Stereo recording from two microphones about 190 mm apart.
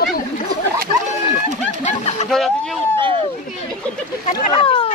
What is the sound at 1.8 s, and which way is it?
Speech, 35° left (ahead or behind).